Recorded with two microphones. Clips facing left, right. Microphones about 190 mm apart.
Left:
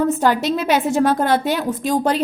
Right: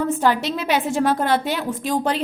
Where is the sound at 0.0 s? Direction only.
45° left (ahead or behind).